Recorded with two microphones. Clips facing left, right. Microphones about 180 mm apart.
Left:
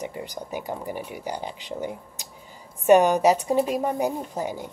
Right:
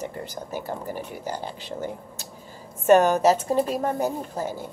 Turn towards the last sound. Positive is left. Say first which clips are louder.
# even
turn(degrees=15)  # may be behind; listen again after turning